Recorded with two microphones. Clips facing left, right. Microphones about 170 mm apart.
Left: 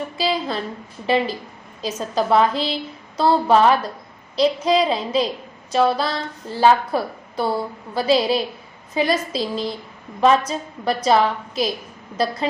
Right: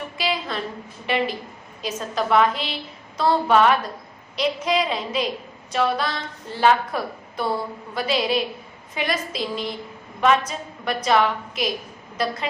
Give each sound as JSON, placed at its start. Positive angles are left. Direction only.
{"t": 0.2, "sound": "a woman's voice", "side_deg": 35}